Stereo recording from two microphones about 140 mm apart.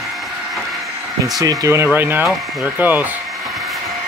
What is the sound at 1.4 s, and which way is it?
Speech, 25° right (ahead or behind).